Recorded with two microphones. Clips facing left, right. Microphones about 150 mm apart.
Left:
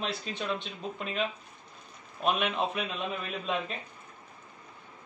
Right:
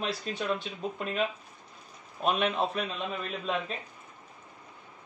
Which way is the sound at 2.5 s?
Centre (ahead or behind).